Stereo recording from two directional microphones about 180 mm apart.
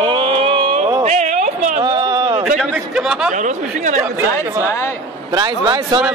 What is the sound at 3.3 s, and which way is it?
Speech, 45° right (ahead or behind).